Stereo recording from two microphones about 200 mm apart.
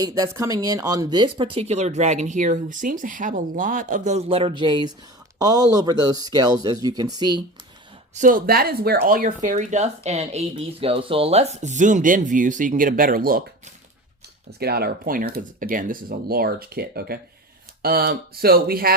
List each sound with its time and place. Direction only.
0.0 s speech: 15° right (ahead or behind)
8.1 s speech: 40° right (ahead or behind)
14.6 s speech: 50° right (ahead or behind)